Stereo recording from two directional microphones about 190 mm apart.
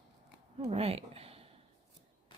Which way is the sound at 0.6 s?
30° right (ahead or behind).